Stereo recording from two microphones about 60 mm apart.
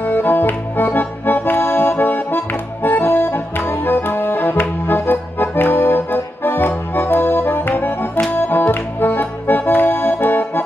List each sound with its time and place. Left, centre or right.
0.0 s music: left
7.0 s accordion: left
8.3 s music: left